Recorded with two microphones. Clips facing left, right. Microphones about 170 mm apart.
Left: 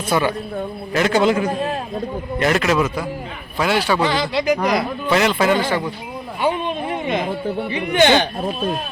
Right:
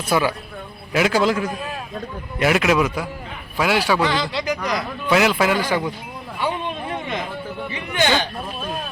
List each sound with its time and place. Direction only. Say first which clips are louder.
0.1 s a man's voice: left 1 dB; 5° right (ahead or behind)
1.5 s a man's voice: left 7 dB; 30° left (ahead or behind)
2.4 s a man's voice: even; 5° right (ahead or behind)
4.1 s speech: left 4 dB; 15° left (ahead or behind)
4.5 s speech: left 6 dB; 60° left (ahead or behind)
5.0 s speech: even; 5° right (ahead or behind)
6.4 s a sound: left 4 dB; 20° left (ahead or behind)
7.7 s speech: left 6 dB; 20° left (ahead or behind)